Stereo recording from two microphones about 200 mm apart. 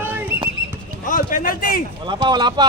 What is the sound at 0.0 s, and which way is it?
Horse, 10° right (ahead or behind).